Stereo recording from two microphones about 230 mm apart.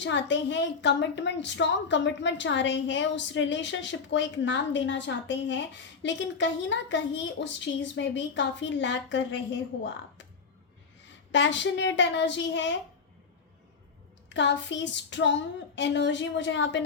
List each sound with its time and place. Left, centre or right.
0.0 s a woman's voice: left
11.3 s a woman's voice: left
14.3 s a woman's voice: left